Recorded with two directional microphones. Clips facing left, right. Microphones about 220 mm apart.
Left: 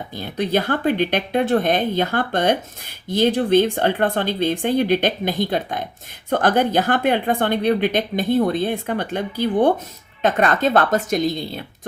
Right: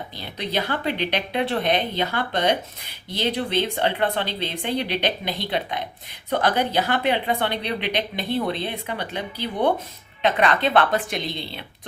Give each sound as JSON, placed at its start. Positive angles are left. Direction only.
{"t": 0.2, "sound": "a woman's voice", "side_deg": 50}